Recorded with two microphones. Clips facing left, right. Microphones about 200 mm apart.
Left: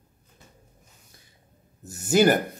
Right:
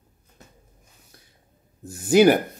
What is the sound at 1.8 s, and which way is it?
Speech, 5° left (ahead or behind).